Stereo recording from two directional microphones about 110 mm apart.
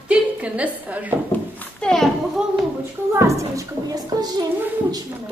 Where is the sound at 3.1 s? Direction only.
25° right (ahead or behind).